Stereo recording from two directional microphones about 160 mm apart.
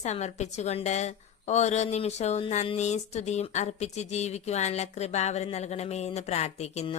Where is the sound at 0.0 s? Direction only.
45° left (ahead or behind).